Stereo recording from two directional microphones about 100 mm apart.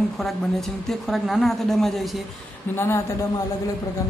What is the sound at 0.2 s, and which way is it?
A man's voice, centre (ahead or behind).